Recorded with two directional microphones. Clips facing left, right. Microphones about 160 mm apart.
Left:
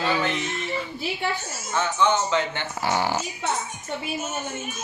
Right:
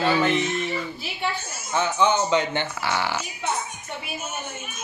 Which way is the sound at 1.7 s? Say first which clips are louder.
Right 1 dB; 15° right (ahead or behind).